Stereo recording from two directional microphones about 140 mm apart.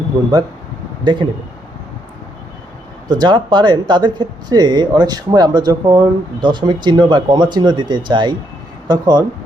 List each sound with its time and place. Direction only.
1.0 s speech: 35° right (ahead or behind)
3.1 s speech: 35° right (ahead or behind)